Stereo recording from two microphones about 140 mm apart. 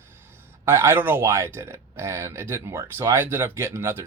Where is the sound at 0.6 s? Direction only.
20° right (ahead or behind).